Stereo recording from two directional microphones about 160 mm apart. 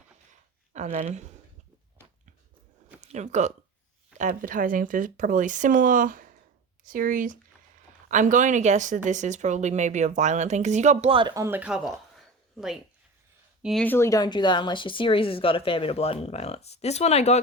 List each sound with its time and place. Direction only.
0.7 s speech: 45° right (ahead or behind)
3.1 s speech: 45° right (ahead or behind)
11.1 s speech: 30° right (ahead or behind)
11.4 s speech: 10° right (ahead or behind)
13.8 s speech: 15° left (ahead or behind); by 17.4 s 45° left (ahead or behind)